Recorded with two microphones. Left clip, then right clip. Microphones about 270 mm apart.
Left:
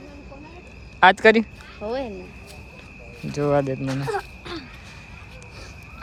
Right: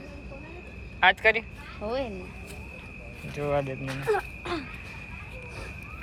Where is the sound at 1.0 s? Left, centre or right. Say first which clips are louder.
Left 7 dB; left.